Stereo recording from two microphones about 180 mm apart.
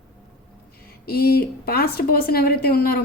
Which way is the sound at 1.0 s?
60° left (ahead or behind).